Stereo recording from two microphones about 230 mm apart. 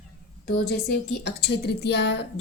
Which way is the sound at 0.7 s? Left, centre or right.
Left.